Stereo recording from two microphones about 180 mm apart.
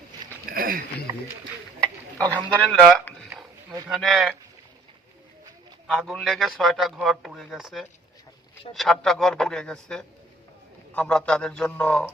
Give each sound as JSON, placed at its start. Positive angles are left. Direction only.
{"t": 0.5, "sound": "a sound", "side_deg": -55}
{"t": 2.1, "sound": "a man's voice", "side_deg": 5}
{"t": 5.9, "sound": "a man's voice", "side_deg": 0}